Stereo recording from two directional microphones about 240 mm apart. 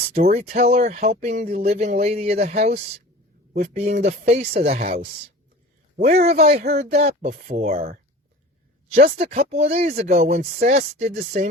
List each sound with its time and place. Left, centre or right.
0.1 s speech: right